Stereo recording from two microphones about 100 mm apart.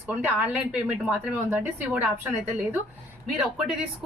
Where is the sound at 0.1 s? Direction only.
15° right (ahead or behind).